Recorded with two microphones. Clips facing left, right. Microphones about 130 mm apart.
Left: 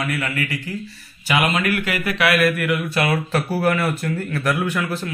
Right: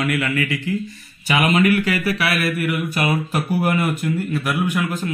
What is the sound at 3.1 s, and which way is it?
Speech, 15° right (ahead or behind).